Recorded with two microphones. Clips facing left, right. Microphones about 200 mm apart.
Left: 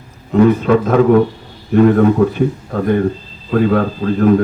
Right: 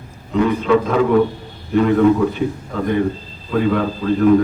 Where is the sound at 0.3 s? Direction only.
45° left (ahead or behind).